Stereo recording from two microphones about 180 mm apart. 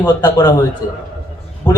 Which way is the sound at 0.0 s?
25° left (ahead or behind).